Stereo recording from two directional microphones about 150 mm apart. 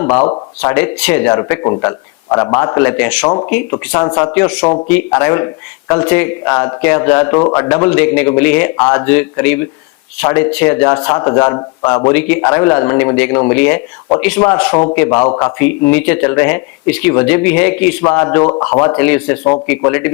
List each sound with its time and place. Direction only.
0.6 s a man's voice: 10° left (ahead or behind)
3.9 s a man's voice: 25° left (ahead or behind)
4.4 s speech: 5° left (ahead or behind)
4.6 s speech: 35° left (ahead or behind)
4.9 s a man's voice: 10° left (ahead or behind)
12.1 s speech: 10° left (ahead or behind)
14.7 s a man's voice: 30° left (ahead or behind)
14.9 s speech: 15° left (ahead or behind)
15.2 s speech: 25° left (ahead or behind)